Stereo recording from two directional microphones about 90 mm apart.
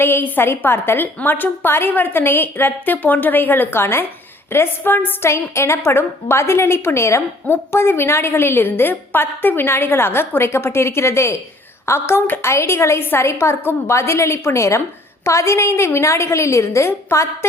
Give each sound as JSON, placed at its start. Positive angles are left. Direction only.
{"t": 0.0, "sound": "a woman's voice", "side_deg": 25}